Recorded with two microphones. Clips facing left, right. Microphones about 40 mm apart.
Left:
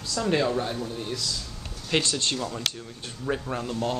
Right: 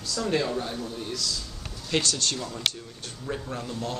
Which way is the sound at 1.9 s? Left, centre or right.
Left.